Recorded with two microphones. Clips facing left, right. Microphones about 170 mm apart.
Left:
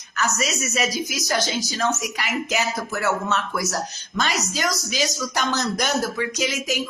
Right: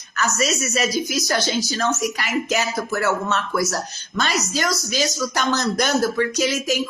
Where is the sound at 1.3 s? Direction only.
15° left (ahead or behind).